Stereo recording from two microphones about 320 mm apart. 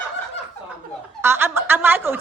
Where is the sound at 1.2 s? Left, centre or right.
Centre.